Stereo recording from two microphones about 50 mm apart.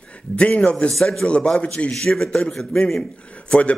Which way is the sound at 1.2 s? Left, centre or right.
Left.